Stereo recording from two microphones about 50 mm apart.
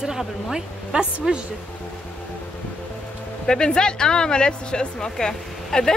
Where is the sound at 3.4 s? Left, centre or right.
Centre.